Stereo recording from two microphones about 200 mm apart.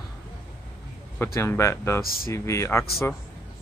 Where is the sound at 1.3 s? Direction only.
15° left (ahead or behind).